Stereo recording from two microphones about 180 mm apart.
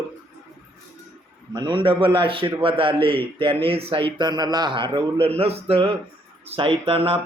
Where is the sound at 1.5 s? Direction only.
25° right (ahead or behind).